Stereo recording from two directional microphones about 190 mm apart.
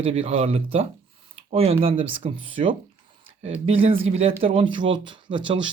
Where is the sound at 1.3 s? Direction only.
30° right (ahead or behind).